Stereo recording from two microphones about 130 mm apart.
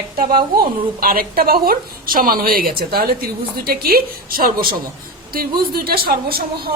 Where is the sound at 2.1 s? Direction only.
90° right.